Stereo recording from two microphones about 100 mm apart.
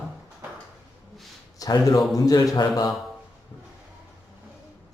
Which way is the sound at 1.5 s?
35° left (ahead or behind).